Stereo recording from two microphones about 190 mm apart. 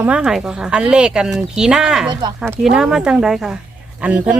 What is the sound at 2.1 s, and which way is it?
Speech, 20° right (ahead or behind).